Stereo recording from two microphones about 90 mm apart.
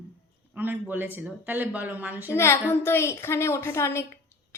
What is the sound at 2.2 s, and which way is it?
A woman's voice, 30° left (ahead or behind).